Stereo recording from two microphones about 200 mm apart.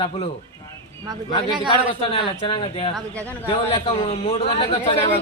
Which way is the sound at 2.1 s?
25° left (ahead or behind).